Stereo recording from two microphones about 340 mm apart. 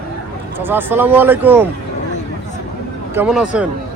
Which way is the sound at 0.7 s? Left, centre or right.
Centre.